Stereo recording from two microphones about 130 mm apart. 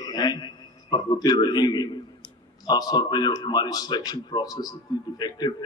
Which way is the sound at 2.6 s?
30° left (ahead or behind).